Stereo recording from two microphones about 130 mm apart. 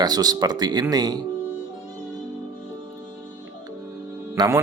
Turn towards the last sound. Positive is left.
turn(degrees=-20)  # may be behind; listen again after turning